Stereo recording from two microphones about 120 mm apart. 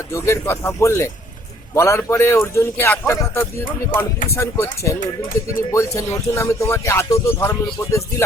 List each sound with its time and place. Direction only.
0.1 s speech: 20° left (ahead or behind)